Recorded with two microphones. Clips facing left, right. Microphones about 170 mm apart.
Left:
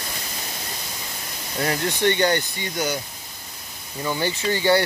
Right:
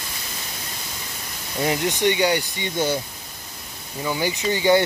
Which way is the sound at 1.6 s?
15° right (ahead or behind).